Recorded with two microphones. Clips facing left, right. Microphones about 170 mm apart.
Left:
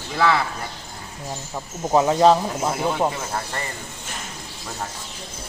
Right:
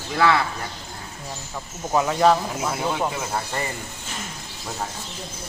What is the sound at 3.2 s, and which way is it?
Speech, 5° right (ahead or behind).